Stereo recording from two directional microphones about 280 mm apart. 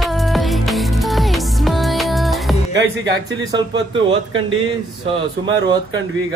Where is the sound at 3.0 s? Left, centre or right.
Centre.